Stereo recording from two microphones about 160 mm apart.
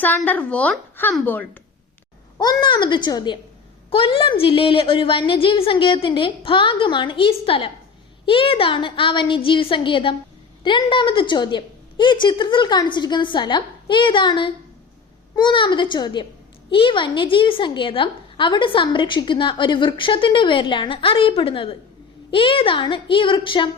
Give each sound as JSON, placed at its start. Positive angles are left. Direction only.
{"t": 0.2, "sound": "speech", "side_deg": 10}
{"t": 2.4, "sound": "a woman's voice", "side_deg": 25}